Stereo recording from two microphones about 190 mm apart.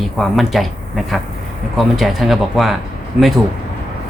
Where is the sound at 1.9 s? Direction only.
Centre (ahead or behind).